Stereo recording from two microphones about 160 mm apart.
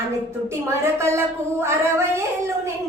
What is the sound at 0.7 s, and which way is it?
A woman's voice, 15° right (ahead or behind).